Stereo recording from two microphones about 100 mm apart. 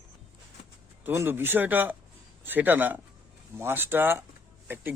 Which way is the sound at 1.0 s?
25° right (ahead or behind).